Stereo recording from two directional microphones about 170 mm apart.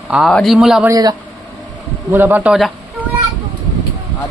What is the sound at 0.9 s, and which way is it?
Speech, 20° right (ahead or behind).